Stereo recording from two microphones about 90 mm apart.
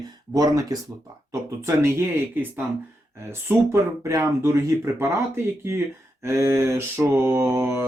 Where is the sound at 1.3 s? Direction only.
30° right (ahead or behind).